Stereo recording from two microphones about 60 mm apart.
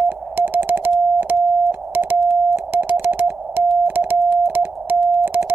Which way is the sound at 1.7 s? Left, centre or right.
Right.